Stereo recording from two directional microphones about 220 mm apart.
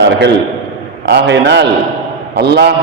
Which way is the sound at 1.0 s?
50° right (ahead or behind).